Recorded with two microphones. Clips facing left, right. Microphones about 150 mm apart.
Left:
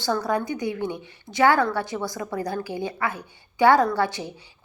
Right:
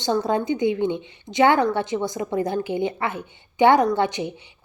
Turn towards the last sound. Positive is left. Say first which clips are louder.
# right 2 dB
turn(degrees=-20)  # may be behind; listen again after turning